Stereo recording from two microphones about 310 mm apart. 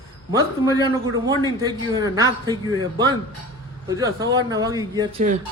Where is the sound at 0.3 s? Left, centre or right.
Centre.